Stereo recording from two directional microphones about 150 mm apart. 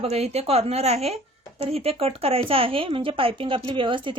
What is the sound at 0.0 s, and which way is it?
A woman's voice, 45° right (ahead or behind).